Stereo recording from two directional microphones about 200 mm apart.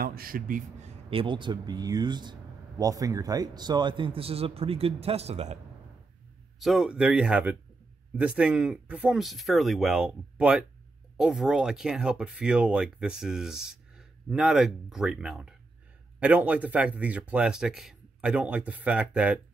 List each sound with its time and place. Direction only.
0.0 s a man's voice: 50° right (ahead or behind)
1.1 s speech: 25° right (ahead or behind)
6.6 s speech: centre (ahead or behind)